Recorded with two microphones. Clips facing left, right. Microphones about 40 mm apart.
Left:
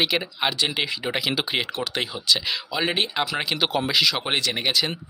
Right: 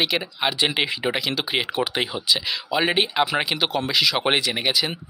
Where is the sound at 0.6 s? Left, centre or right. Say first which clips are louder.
Right 3 dB; right.